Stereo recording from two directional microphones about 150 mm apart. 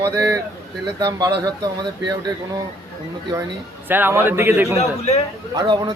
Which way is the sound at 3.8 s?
15° right (ahead or behind).